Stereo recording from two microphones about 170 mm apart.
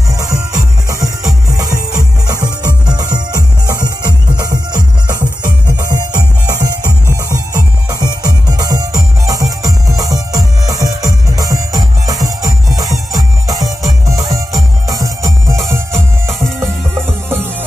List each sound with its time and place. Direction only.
0.1 s music: 20° right (ahead or behind)